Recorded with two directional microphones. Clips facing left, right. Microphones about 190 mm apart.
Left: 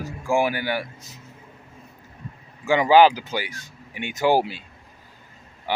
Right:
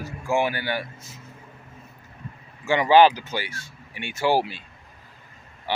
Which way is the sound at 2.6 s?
15° left (ahead or behind).